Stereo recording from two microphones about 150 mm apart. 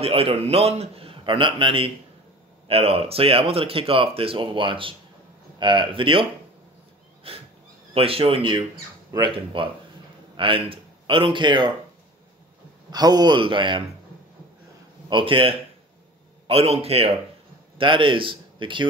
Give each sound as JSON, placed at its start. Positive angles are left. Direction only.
{"t": 0.0, "sound": "speech", "side_deg": -40}
{"t": 7.3, "sound": "a man's voice", "side_deg": -40}
{"t": 12.9, "sound": "speech", "side_deg": -25}
{"t": 15.0, "sound": "speech", "side_deg": -35}